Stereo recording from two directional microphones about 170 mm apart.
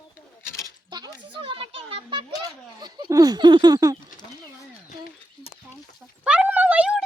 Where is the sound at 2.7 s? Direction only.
25° right (ahead or behind).